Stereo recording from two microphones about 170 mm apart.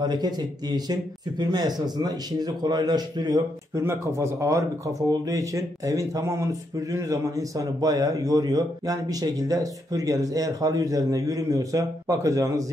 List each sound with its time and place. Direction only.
0.0 s speech: 25° right (ahead or behind)